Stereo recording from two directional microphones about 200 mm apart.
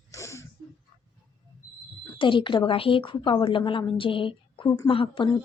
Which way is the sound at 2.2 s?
25° left (ahead or behind).